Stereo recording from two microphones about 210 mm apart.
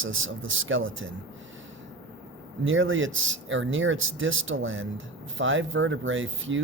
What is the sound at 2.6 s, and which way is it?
Speech, 65° right (ahead or behind).